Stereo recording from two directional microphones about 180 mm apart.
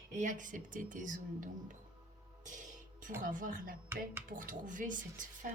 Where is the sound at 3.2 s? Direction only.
50° right (ahead or behind).